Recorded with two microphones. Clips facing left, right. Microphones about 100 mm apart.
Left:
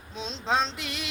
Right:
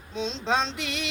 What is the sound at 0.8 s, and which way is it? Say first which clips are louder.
Speech: right 4 dB; 75° right (ahead or behind).